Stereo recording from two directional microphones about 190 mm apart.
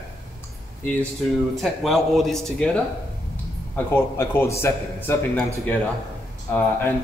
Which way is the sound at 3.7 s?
10° left (ahead or behind).